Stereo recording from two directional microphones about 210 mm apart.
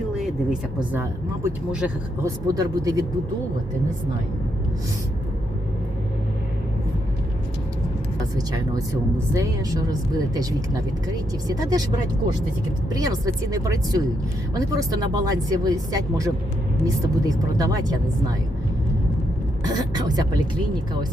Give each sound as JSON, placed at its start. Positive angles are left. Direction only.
{"t": 0.9, "sound": "speech", "side_deg": -10}
{"t": 8.4, "sound": "speech", "side_deg": -15}
{"t": 19.6, "sound": "speech", "side_deg": -20}